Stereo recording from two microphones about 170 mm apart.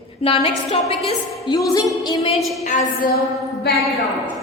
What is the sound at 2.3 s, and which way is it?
Speech, centre (ahead or behind).